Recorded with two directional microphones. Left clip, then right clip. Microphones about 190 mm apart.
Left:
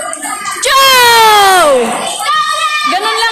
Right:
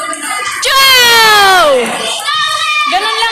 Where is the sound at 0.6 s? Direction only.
15° left (ahead or behind).